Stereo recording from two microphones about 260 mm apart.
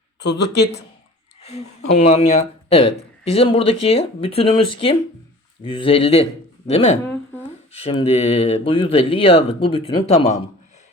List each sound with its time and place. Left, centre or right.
0.2 s speech: left
1.4 s a sound: left
2.0 s speech: left